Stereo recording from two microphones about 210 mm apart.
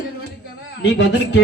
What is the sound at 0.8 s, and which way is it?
Speech, 55° left (ahead or behind).